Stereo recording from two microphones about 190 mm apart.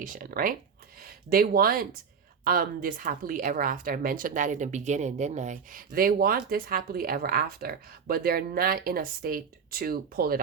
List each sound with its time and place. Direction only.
0.0 s speech: 45° right (ahead or behind)